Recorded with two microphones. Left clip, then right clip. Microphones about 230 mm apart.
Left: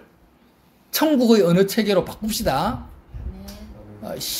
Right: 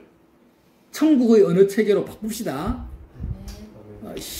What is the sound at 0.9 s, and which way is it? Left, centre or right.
Speech, left.